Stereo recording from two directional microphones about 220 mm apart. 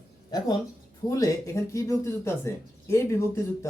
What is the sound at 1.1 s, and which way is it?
Speech, 15° left (ahead or behind).